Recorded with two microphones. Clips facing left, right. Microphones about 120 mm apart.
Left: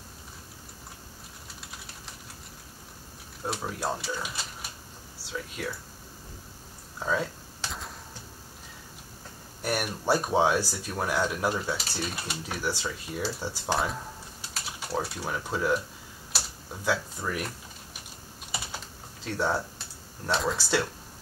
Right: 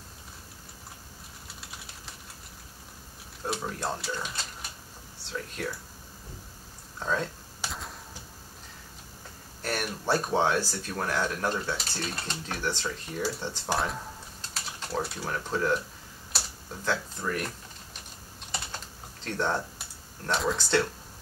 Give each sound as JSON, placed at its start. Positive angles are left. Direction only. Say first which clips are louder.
{"t": 3.4, "sound": "speech", "louder": "left 1 dB", "side_deg": 5}
{"t": 7.0, "sound": "speech", "louder": "left 1 dB", "side_deg": 5}
{"t": 7.6, "sound": "a sound", "louder": "even", "side_deg": -10}
{"t": 9.6, "sound": "speech", "louder": "left 2 dB", "side_deg": 10}
{"t": 13.7, "sound": "typing", "louder": "left 1 dB", "side_deg": 0}
{"t": 19.2, "sound": "speech", "louder": "left 1 dB", "side_deg": 5}